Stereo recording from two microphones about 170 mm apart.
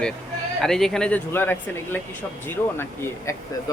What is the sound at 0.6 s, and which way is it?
Speech, centre (ahead or behind).